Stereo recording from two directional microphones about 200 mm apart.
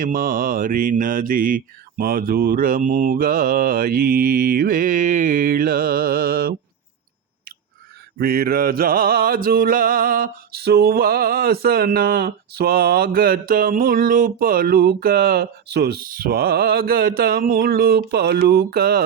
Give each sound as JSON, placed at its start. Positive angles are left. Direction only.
{"t": 0.0, "sound": "music", "side_deg": -45}
{"t": 8.2, "sound": "music", "side_deg": -50}